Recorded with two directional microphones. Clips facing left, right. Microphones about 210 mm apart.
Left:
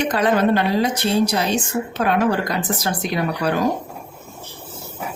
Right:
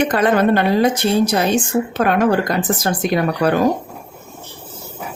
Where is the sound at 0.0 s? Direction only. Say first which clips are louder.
Right 3 dB; 55° right (ahead or behind).